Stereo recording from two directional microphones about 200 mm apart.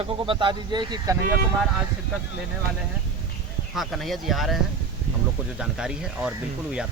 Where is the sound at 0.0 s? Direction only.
25° right (ahead or behind).